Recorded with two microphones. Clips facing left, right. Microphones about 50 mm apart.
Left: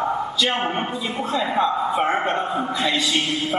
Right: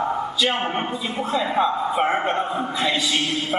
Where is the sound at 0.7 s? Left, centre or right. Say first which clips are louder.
Even; centre.